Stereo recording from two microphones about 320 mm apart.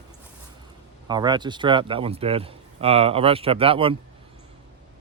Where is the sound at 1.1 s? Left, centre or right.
Centre.